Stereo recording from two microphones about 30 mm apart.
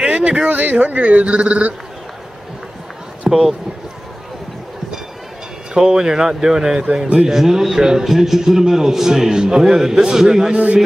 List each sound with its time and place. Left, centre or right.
0.0 s a sound: right
0.5 s speech: right
3.3 s speech: centre
5.9 s a man's voice: centre
8.0 s a man's voice: centre